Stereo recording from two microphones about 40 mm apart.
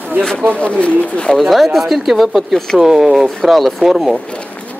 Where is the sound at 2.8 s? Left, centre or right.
Centre.